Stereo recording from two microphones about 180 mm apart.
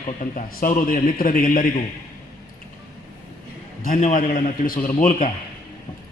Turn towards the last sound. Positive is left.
turn(degrees=45)  # may be behind; listen again after turning